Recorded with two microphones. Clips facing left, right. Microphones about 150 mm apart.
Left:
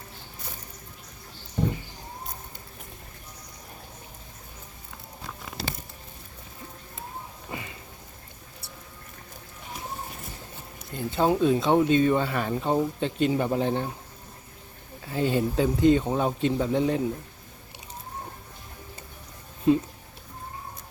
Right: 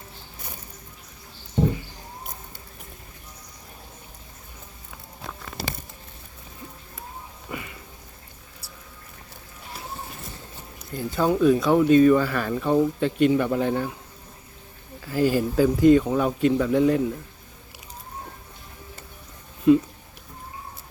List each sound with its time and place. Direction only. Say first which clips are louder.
7.5 s a sound: right 2 dB; 25° left (ahead or behind)
10.9 s speech: right 1 dB; 25° left (ahead or behind)
15.0 s speech: right 3 dB; 25° left (ahead or behind)